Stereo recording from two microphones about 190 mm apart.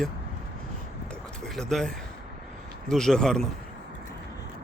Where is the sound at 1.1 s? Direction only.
5° left (ahead or behind).